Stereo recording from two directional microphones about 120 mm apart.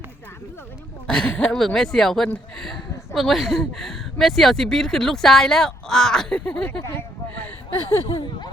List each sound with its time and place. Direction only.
1.0 s speech: 5° left (ahead or behind)